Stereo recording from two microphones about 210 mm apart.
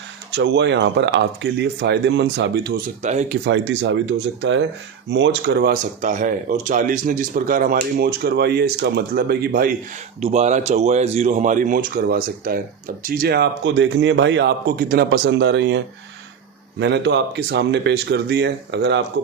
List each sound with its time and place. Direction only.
0.3 s speech: 55° right (ahead or behind); by 3.2 s 35° right (ahead or behind)
3.7 s a man's voice: 60° right (ahead or behind)
10.2 s a man's voice: 30° right (ahead or behind); by 15.8 s 55° right (ahead or behind)
16.8 s a man's voice: 55° right (ahead or behind)